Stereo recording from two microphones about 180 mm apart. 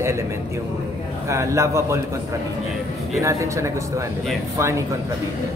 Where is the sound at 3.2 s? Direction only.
15° right (ahead or behind).